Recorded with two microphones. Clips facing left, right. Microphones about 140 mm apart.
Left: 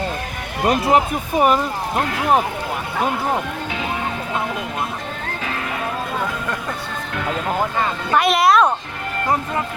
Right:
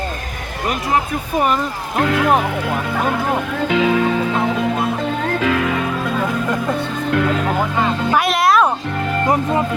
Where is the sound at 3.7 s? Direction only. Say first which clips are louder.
Right 11 dB; 90° right.